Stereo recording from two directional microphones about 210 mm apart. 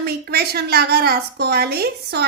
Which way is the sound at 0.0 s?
50° right (ahead or behind).